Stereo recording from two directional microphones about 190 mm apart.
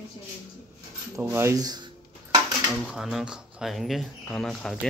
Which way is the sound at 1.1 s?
15° right (ahead or behind).